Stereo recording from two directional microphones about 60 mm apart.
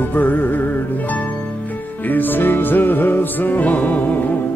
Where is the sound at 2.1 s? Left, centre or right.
Left.